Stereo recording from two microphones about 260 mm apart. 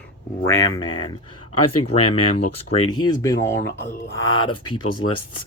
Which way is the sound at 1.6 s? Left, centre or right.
Left.